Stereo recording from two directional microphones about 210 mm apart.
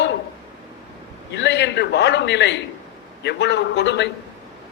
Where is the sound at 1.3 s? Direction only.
55° left (ahead or behind).